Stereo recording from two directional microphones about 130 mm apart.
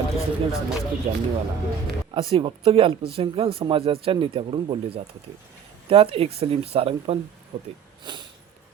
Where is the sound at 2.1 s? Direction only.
45° right (ahead or behind).